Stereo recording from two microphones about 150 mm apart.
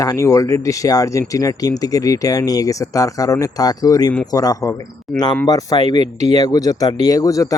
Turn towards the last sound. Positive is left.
turn(degrees=25)  # may be behind; listen again after turning